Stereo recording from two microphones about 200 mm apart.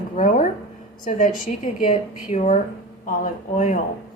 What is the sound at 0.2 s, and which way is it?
A woman's voice, 40° left (ahead or behind).